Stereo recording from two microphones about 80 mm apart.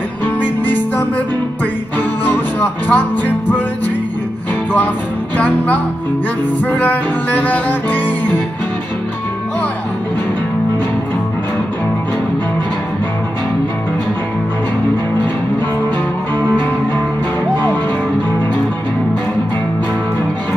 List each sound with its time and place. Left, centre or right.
0.4 s music: left
2.2 s music: left
6.8 s music: left